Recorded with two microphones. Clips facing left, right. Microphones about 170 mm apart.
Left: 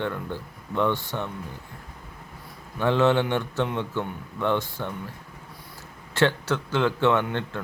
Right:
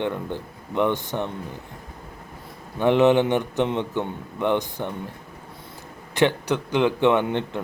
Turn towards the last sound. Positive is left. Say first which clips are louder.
# right 3 dB
turn(degrees=-20)  # may be behind; listen again after turning